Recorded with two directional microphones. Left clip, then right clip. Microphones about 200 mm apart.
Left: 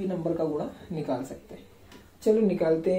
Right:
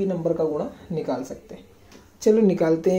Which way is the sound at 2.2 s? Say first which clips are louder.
Right 5 dB; 50° right (ahead or behind).